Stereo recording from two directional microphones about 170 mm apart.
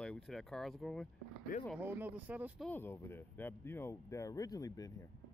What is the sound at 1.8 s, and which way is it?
Speech, 10° right (ahead or behind).